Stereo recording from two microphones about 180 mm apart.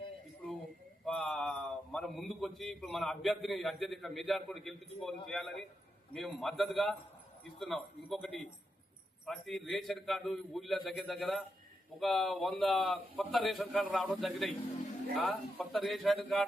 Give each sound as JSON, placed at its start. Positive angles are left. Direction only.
{"t": 1.0, "sound": "a man's voice", "side_deg": 5}